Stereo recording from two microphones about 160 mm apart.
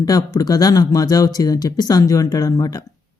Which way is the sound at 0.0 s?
20° left (ahead or behind).